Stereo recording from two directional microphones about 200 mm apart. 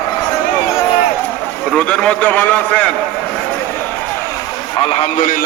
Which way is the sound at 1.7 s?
5° left (ahead or behind).